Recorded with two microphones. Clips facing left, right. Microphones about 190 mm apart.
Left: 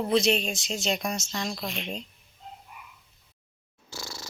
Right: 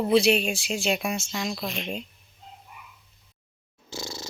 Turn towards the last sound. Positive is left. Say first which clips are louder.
# right 5 dB
turn(degrees=-20)  # may be behind; listen again after turning